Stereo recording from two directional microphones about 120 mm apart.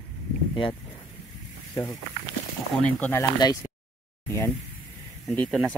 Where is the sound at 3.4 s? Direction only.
35° left (ahead or behind).